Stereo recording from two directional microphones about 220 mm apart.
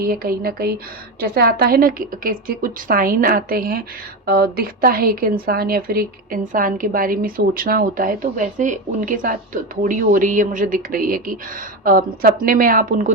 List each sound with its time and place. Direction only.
0.0 s a woman's voice: 40° right (ahead or behind)